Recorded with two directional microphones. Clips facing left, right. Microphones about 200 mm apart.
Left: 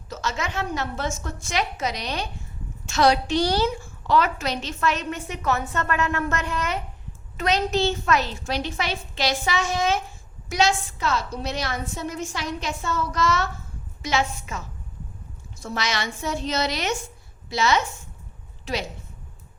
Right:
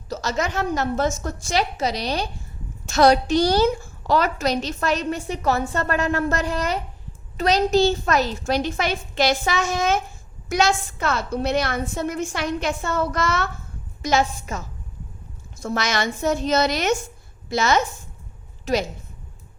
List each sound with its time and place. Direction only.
0.1 s a woman's voice: 40° right (ahead or behind); by 13.5 s 55° right (ahead or behind)
14.0 s a woman's voice: 40° right (ahead or behind)